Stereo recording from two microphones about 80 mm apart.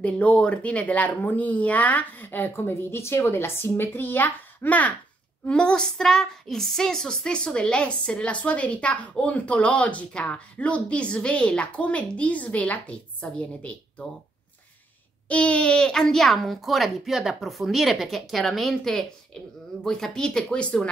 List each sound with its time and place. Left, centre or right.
0.0 s speech: centre
5.4 s child singing: centre
15.2 s a child's voice: centre
19.8 s child singing: centre